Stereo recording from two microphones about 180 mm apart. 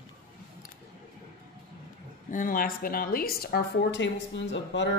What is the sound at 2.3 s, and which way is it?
Speech, 50° left (ahead or behind).